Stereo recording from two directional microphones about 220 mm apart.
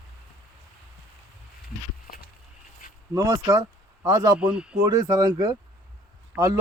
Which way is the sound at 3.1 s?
15° right (ahead or behind).